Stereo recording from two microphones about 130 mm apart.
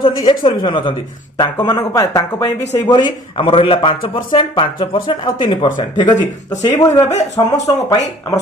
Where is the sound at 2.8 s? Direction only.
35° left (ahead or behind).